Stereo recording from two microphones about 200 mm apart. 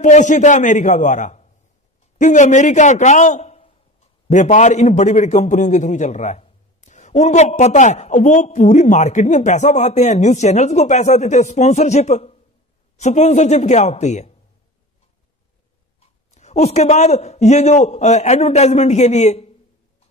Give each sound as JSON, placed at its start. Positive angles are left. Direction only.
{"t": 0.0, "sound": "a man's voice", "side_deg": 35}
{"t": 16.3, "sound": "a man's voice", "side_deg": 35}